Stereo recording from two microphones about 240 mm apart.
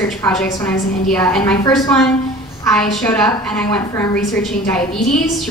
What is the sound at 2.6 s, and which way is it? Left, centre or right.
A woman's voice, centre.